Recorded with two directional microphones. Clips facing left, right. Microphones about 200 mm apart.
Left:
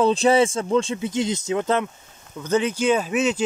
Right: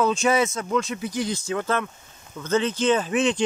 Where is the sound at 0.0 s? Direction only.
30° left (ahead or behind).